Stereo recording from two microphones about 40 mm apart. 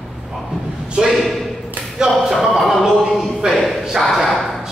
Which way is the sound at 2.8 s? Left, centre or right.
Centre.